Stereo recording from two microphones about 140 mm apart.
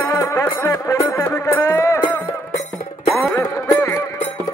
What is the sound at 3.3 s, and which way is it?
Music, 25° left (ahead or behind).